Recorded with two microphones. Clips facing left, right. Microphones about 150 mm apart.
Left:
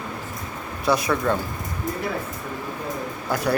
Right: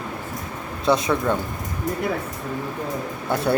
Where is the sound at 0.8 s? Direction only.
20° right (ahead or behind).